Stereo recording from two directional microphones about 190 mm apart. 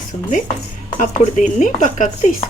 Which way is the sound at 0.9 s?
40° left (ahead or behind).